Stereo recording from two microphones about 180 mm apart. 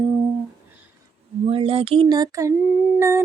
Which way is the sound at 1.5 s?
30° right (ahead or behind).